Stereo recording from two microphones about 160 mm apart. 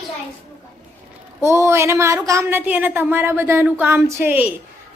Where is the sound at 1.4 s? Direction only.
15° right (ahead or behind).